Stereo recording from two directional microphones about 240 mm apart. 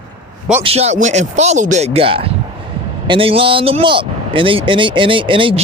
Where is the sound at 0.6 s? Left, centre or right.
Right.